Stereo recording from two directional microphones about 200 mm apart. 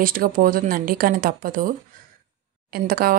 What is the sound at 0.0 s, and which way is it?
Speech, 45° right (ahead or behind).